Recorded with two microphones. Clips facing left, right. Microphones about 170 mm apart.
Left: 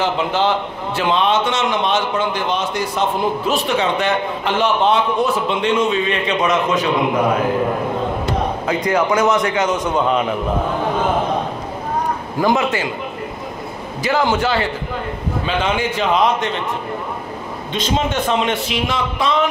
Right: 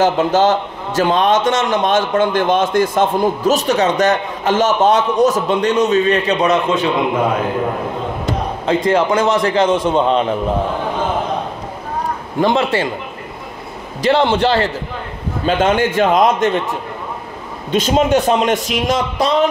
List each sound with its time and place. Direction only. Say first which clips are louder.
0.0 s a man's voice: right 5 dB; 45° right (ahead or behind)
8.6 s a man's voice: right 5 dB; 30° right (ahead or behind)
12.4 s a man's voice: right 2 dB; 30° right (ahead or behind)
14.2 s a man's voice: right 3 dB; 35° right (ahead or behind)
15.4 s a man's voice: right 6 dB; 50° right (ahead or behind)
17.6 s a man's voice: right 6 dB; 40° right (ahead or behind)